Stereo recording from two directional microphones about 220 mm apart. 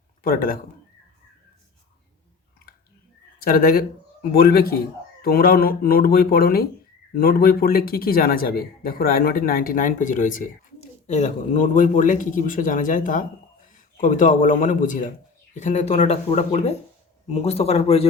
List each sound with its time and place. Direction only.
0.2 s speech: 40° left (ahead or behind)
3.4 s a man's voice: 45° left (ahead or behind); by 18.1 s 25° left (ahead or behind)